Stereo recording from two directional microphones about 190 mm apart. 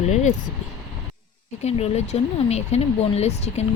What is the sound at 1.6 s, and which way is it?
Speech, 35° left (ahead or behind).